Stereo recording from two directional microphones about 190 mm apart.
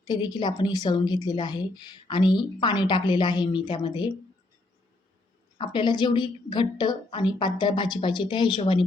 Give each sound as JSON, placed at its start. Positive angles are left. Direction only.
{"t": 0.1, "sound": "speech", "side_deg": 20}
{"t": 5.5, "sound": "speech", "side_deg": 25}